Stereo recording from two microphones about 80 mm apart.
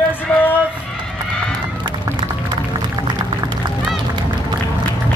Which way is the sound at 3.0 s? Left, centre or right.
Right.